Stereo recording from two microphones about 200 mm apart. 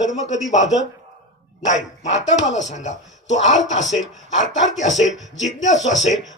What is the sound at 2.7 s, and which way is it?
Speech, 35° left (ahead or behind).